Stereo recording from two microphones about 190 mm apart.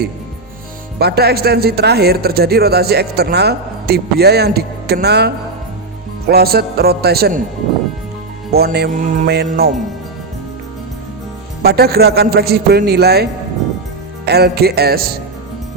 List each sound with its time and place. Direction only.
0.9 s speech: 55° right (ahead or behind)
8.5 s speech: 55° right (ahead or behind)
11.6 s speech: 55° right (ahead or behind)
14.3 s speech: 55° right (ahead or behind)